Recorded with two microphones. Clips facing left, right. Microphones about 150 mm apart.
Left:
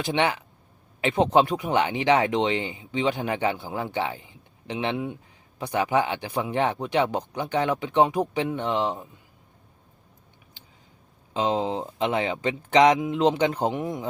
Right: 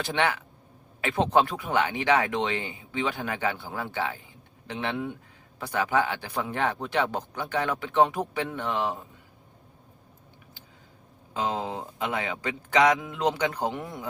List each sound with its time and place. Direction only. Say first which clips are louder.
0.0 s speech: left 2 dB; 20° left (ahead or behind)
11.3 s speech: left 5 dB; 20° left (ahead or behind)